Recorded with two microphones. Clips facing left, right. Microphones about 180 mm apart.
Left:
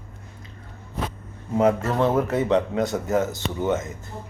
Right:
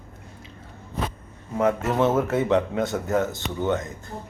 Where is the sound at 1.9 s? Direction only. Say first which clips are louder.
Even; 5° right (ahead or behind).